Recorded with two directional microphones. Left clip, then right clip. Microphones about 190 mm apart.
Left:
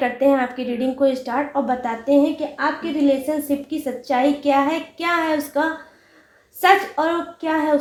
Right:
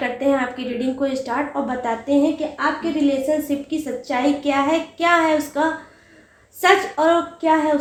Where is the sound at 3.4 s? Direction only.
30° left (ahead or behind).